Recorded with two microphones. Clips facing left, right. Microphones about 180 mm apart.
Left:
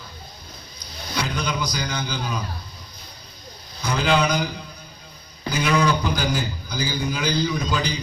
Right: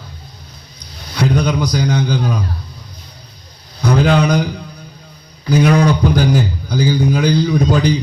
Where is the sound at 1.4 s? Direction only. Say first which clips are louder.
Right 10 dB; 60° right (ahead or behind).